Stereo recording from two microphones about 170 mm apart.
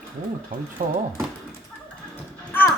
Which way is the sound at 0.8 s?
55° right (ahead or behind).